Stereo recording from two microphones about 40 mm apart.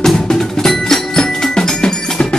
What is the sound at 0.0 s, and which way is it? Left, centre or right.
Percussion, centre.